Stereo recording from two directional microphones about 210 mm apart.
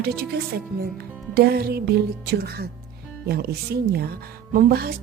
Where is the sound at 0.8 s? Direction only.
50° right (ahead or behind).